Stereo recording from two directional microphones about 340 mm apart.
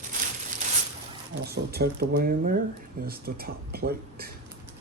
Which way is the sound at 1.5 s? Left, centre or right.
Right.